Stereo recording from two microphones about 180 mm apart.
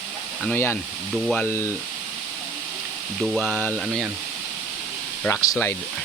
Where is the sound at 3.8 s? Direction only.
5° right (ahead or behind).